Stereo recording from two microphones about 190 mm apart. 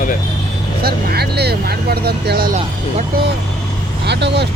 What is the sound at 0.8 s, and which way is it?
Speech, 55° right (ahead or behind).